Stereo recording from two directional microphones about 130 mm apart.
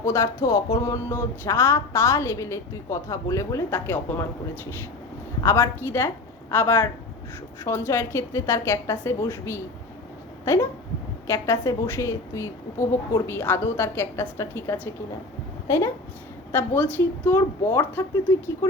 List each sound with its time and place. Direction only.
0.0 s a woman's voice: 20° left (ahead or behind)
10.4 s a sound: 25° left (ahead or behind)
11.3 s a woman's voice: 20° left (ahead or behind)